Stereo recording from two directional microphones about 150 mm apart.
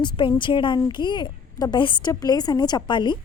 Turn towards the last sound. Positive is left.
turn(degrees=30)  # may be behind; listen again after turning